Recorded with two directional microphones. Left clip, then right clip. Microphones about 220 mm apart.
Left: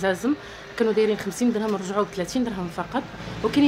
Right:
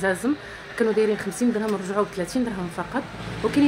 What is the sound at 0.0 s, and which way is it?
A woman's voice, centre (ahead or behind).